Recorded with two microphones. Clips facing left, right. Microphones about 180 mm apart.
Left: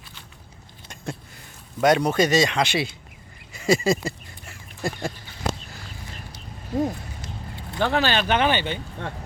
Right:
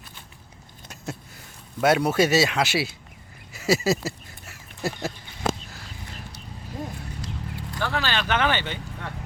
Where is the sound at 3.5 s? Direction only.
5° right (ahead or behind).